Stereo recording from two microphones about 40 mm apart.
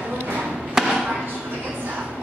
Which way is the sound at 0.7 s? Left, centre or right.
Centre.